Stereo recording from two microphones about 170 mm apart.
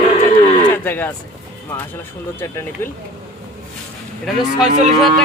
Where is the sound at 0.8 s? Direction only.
10° left (ahead or behind).